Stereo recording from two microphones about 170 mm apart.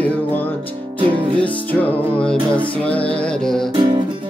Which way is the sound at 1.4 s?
10° left (ahead or behind).